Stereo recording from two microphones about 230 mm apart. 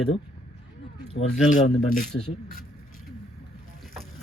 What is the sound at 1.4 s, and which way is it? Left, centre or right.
Speech, left.